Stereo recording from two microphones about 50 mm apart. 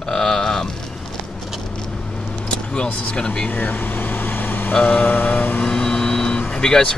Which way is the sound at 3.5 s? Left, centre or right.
Left.